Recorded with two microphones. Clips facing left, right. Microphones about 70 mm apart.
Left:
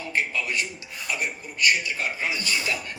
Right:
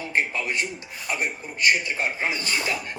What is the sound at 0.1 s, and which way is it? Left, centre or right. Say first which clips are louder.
A man's voice: right 1 dB; right.